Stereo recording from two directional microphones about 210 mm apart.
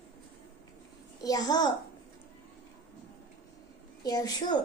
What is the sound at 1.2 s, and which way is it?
Speech, 20° left (ahead or behind).